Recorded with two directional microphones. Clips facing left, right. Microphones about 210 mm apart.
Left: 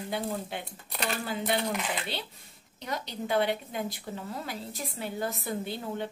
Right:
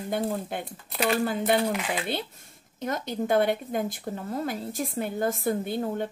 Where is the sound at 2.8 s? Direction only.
50° right (ahead or behind).